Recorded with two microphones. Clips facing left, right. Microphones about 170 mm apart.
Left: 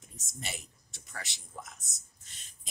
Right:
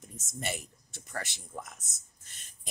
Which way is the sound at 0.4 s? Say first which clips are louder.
Right 6 dB; 55° right (ahead or behind).